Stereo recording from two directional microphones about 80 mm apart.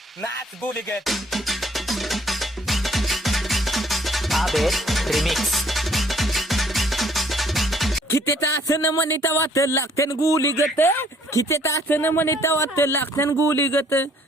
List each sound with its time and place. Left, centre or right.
1.0 s music: centre
8.6 s speech: left
10.8 s speech: left
11.9 s speech: left